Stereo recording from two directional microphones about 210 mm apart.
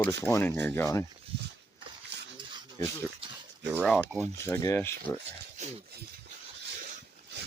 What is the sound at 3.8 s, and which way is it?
Speech, 5° left (ahead or behind).